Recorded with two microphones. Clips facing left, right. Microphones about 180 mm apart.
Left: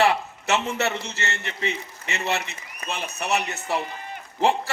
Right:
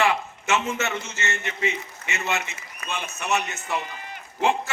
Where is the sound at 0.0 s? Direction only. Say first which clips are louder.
Left 2 dB; 35° left (ahead or behind).